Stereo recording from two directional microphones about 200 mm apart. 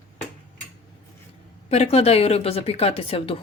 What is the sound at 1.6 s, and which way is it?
Speech, 30° left (ahead or behind).